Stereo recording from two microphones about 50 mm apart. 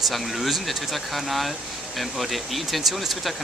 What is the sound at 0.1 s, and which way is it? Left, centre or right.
Speech, centre.